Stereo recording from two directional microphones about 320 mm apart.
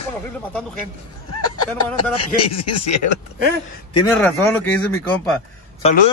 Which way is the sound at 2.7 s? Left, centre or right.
Left.